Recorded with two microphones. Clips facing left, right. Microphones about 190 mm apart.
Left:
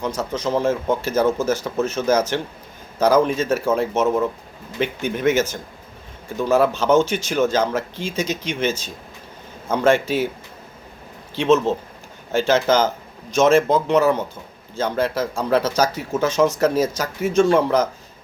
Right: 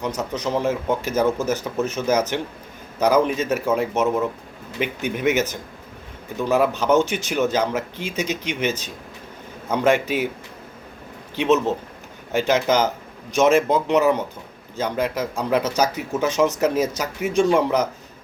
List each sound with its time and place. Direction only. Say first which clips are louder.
0.0 s speech: left 1 dB; 15° right (ahead or behind)
4.0 s speech: left 3 dB; centre (ahead or behind)
4.8 s speech: left 2 dB; 10° right (ahead or behind)
11.3 s speech: left 2 dB; 15° right (ahead or behind)